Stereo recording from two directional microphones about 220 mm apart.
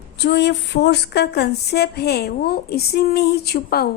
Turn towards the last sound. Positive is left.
turn(degrees=45)  # may be behind; listen again after turning